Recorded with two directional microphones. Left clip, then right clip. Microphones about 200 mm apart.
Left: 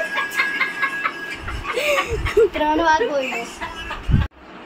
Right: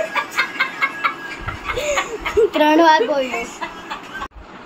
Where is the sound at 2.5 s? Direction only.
55° right (ahead or behind).